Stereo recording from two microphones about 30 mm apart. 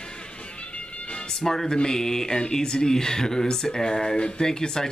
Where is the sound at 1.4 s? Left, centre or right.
Centre.